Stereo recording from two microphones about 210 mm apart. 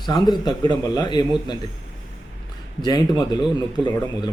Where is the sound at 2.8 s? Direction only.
20° left (ahead or behind).